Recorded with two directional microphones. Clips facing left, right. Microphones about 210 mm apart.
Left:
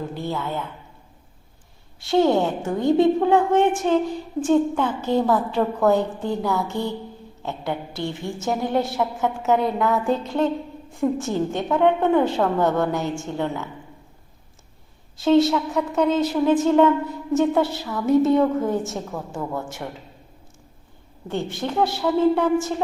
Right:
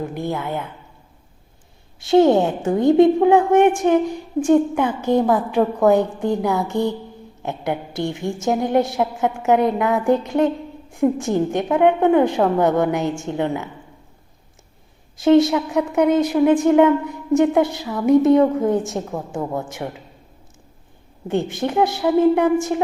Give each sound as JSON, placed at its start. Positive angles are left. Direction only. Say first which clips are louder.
{"t": 0.0, "sound": "a woman's voice", "louder": "right 3 dB", "side_deg": -15}
{"t": 2.0, "sound": "a woman's voice", "louder": "right 5 dB", "side_deg": -20}
{"t": 15.2, "sound": "a woman's voice", "louder": "right 3 dB", "side_deg": -15}
{"t": 21.2, "sound": "a woman's voice", "louder": "right 5 dB", "side_deg": -20}